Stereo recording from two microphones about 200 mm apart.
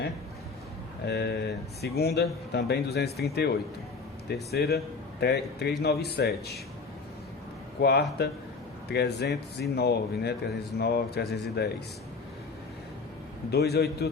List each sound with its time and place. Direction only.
1.0 s speech: 55° left (ahead or behind)
4.5 s a man's voice: 50° left (ahead or behind)
7.8 s speech: 55° left (ahead or behind)
13.5 s a man's voice: 55° left (ahead or behind)